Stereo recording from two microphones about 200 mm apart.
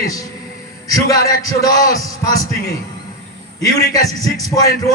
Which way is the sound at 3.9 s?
20° left (ahead or behind).